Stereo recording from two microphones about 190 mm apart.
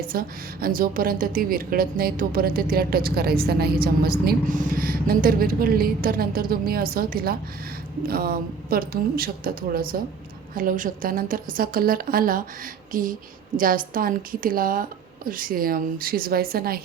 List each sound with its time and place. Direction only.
0.1 s a woman's voice: 50° right (ahead or behind)